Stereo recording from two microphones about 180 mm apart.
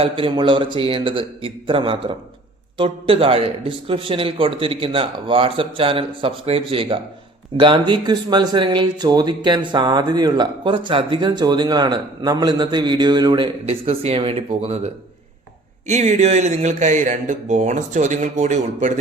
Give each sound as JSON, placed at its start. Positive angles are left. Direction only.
{"t": 0.0, "sound": "speech", "side_deg": -30}
{"t": 15.9, "sound": "speech", "side_deg": -40}